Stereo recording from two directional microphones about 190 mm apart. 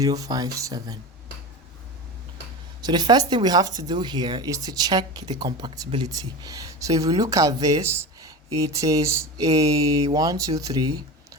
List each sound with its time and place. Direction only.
0.0 s speech: 20° right (ahead or behind)
2.8 s speech: 20° right (ahead or behind)